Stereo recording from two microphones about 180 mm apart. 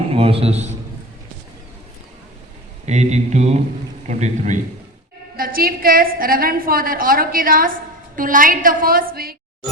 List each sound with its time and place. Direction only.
0.1 s a man's voice: 35° right (ahead or behind)
2.8 s a woman's voice: 40° right (ahead or behind); by 9.3 s 55° right (ahead or behind)